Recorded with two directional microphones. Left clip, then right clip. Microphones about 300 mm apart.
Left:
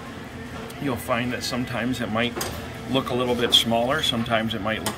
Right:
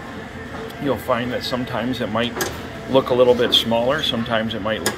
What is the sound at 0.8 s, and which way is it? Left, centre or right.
Speech, centre.